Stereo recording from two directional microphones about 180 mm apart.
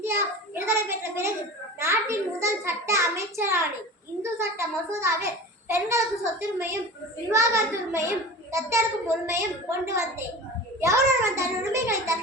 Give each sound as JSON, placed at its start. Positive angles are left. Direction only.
{"t": 0.0, "sound": "a child's voice", "side_deg": -15}
{"t": 7.3, "sound": "a child's voice", "side_deg": -15}